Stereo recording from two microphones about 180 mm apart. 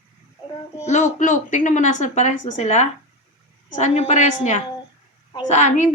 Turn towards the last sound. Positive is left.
turn(degrees=40)  # may be behind; listen again after turning